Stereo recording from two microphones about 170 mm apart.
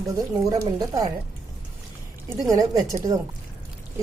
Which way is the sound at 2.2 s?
20° right (ahead or behind).